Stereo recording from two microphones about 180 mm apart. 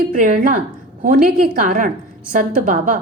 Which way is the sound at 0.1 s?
50° right (ahead or behind).